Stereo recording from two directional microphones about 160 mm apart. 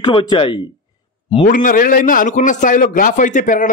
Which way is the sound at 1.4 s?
55° left (ahead or behind).